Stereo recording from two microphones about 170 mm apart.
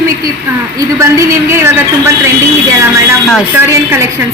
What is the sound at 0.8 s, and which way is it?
Speech, 20° right (ahead or behind).